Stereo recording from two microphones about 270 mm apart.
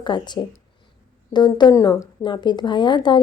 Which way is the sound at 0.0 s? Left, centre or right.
Centre.